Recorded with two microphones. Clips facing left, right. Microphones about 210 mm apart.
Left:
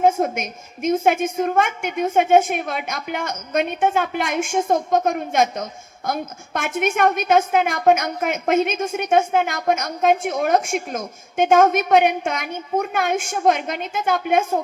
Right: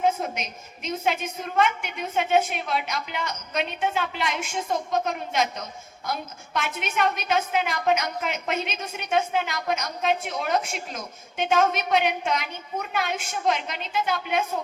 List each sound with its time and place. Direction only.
0.0 s a woman's voice: 50° left (ahead or behind)